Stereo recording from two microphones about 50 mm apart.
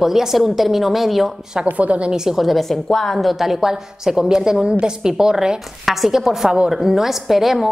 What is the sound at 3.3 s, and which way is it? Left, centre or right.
A woman's voice, centre.